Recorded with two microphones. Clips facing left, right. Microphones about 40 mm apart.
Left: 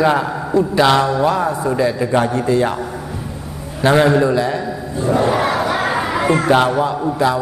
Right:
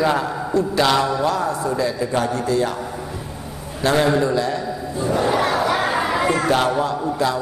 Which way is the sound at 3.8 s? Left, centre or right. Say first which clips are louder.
Left 5 dB; left.